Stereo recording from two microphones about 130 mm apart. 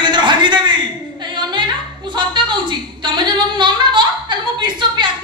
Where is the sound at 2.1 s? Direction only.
35° right (ahead or behind).